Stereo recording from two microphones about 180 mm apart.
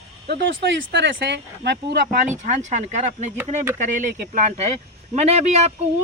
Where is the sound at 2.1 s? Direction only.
45° right (ahead or behind).